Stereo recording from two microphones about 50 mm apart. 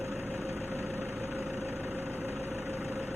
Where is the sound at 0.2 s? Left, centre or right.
Right.